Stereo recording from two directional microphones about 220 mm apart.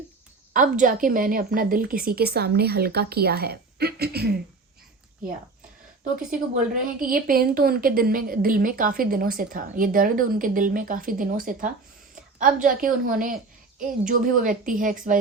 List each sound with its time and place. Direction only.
0.5 s a woman's voice: 35° right (ahead or behind)
6.1 s a woman's voice: 35° right (ahead or behind)